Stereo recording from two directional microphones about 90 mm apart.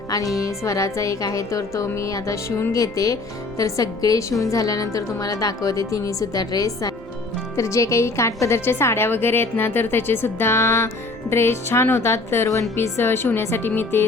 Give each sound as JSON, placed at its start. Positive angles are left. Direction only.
{"t": 0.3, "sound": "a woman's voice", "side_deg": 35}